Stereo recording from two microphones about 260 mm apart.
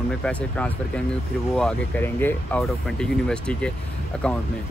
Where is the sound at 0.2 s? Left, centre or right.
Centre.